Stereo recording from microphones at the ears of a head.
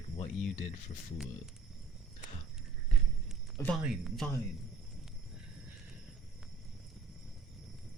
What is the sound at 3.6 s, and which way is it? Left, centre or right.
Speech, centre.